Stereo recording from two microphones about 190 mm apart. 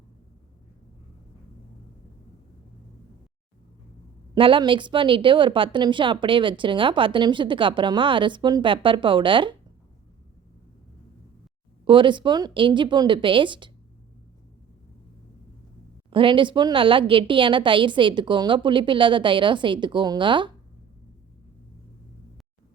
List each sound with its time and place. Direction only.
4.4 s a woman's voice: 25° right (ahead or behind)
11.9 s a woman's voice: 25° right (ahead or behind)
16.0 s a woman's voice: 25° right (ahead or behind)